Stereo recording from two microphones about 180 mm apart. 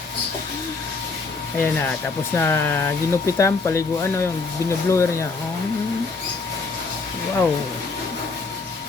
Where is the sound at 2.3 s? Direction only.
15° left (ahead or behind).